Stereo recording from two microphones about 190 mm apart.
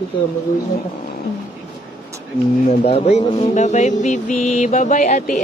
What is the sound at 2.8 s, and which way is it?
Music, 35° left (ahead or behind).